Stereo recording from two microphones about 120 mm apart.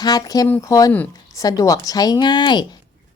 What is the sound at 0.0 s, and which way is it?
A woman's voice, 30° left (ahead or behind).